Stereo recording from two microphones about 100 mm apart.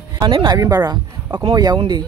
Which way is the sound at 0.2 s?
55° right (ahead or behind).